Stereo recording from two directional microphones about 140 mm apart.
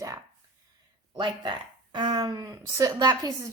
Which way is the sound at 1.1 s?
35° right (ahead or behind).